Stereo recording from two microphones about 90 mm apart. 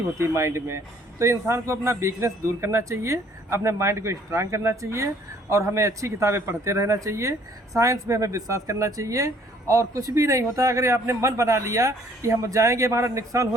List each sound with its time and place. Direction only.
0.2 s a man's voice: 30° right (ahead or behind)